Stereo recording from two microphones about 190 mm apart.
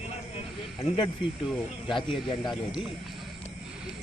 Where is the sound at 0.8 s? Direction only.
25° left (ahead or behind).